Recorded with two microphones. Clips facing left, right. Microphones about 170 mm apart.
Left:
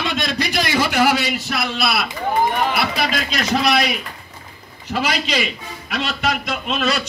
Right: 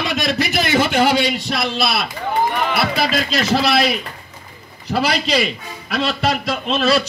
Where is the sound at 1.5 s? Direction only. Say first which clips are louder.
Left 1 dB; centre (ahead or behind).